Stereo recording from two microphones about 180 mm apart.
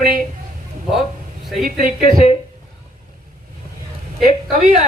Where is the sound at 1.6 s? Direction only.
50° right (ahead or behind).